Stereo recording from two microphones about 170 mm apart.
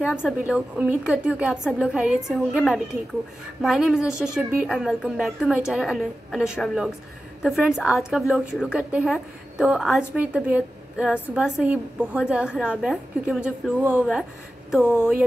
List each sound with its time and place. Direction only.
0.0 s a woman's voice: 5° right (ahead or behind)
4.1 s speech: 15° left (ahead or behind)
4.6 s a woman's voice: 5° right (ahead or behind)